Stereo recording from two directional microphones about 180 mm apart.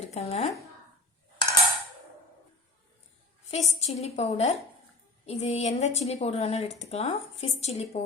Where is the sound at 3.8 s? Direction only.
40° left (ahead or behind).